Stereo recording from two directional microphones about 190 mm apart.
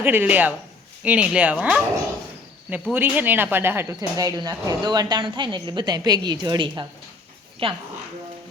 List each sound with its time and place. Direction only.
0.0 s speech: 10° right (ahead or behind); by 7.8 s 30° right (ahead or behind)